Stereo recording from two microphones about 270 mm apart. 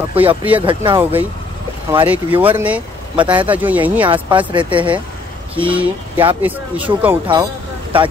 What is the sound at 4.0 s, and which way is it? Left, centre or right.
Speech, centre.